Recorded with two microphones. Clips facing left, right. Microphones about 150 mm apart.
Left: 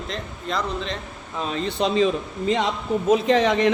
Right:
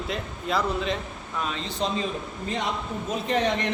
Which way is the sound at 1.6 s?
70° left (ahead or behind).